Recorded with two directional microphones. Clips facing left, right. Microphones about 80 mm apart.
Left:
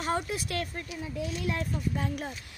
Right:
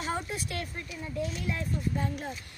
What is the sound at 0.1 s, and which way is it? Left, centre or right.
Speech, left.